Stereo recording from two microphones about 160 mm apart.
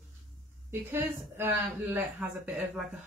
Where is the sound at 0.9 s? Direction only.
15° right (ahead or behind).